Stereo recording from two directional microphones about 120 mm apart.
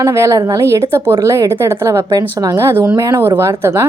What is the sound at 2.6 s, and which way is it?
A woman's voice, 20° right (ahead or behind).